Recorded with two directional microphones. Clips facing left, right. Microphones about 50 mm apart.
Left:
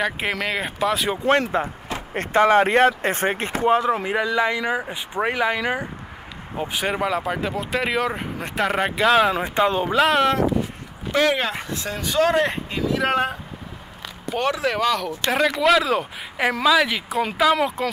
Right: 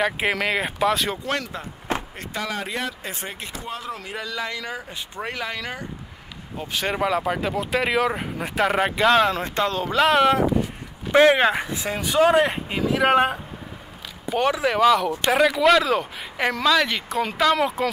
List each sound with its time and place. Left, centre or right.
0.0 s speech: centre
1.2 s speech: left; by 7.0 s centre
7.0 s speech: centre
9.9 s speech: centre
11.1 s speech: right
14.3 s speech: centre